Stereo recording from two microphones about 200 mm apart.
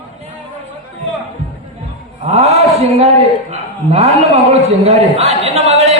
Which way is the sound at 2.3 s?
30° right (ahead or behind).